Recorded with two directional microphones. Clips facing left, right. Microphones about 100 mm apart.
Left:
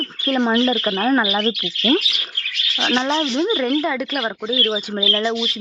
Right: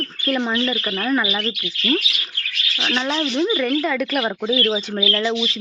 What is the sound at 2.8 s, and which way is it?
Speech, 25° left (ahead or behind).